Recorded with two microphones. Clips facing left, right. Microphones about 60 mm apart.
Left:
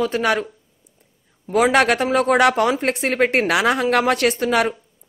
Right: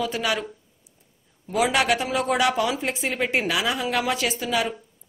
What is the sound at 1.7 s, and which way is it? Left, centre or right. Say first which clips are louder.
A woman's voice: left 6 dB; left.